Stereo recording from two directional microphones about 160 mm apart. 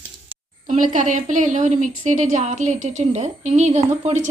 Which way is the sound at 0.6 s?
50° right (ahead or behind).